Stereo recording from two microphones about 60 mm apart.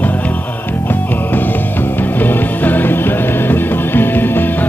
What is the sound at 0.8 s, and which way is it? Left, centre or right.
Music, left.